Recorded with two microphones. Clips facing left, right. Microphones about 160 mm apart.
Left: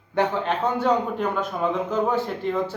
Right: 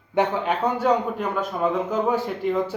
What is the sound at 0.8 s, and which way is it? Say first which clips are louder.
A man's voice: even; 5° right (ahead or behind).